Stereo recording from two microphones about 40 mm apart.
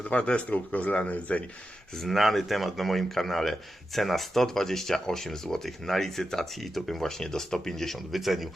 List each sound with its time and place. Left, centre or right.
0.0 s speech: left
0.5 s speech: left
1.9 s speech: centre